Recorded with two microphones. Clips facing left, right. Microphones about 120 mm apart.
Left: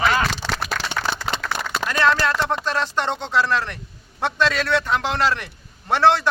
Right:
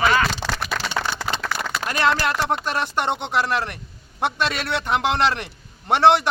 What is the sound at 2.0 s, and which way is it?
A man's voice, 15° right (ahead or behind).